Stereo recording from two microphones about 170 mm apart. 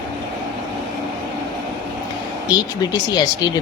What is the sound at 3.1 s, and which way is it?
Speech, 25° left (ahead or behind).